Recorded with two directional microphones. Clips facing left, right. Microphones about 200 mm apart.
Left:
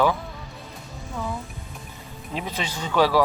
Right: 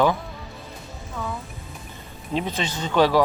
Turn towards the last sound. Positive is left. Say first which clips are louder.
# right 1 dB
turn(degrees=5)  # may be behind; listen again after turning